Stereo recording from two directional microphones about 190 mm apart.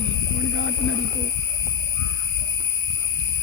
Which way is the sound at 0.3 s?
90° left.